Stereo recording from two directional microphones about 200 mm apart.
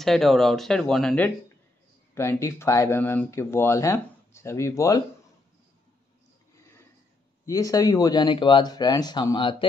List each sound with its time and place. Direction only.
0.0 s speech: centre (ahead or behind)
7.4 s speech: 15° left (ahead or behind)